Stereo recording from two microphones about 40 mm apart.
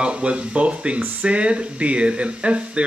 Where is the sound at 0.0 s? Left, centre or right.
Right.